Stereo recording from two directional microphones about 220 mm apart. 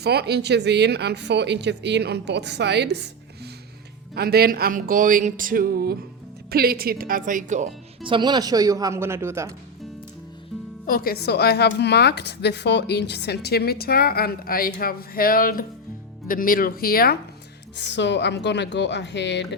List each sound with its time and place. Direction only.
0.0 s speech: 45° right (ahead or behind); by 9.6 s 10° right (ahead or behind)
10.8 s a woman's voice: 40° left (ahead or behind)